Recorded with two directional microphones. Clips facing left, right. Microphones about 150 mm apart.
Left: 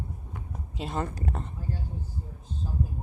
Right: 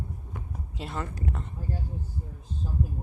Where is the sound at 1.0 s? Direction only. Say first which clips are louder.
Left 2 dB; 35° left (ahead or behind).